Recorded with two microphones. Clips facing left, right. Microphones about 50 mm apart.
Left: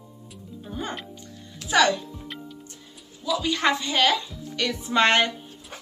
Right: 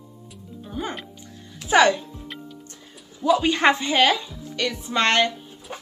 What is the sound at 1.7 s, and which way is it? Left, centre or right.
Music, right.